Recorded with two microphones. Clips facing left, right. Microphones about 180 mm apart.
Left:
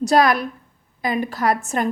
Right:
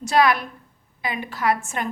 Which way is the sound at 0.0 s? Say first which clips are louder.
Left 3 dB; 40° left (ahead or behind).